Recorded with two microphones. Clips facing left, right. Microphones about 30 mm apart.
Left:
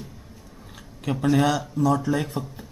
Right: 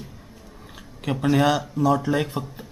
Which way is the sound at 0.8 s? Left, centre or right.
Centre.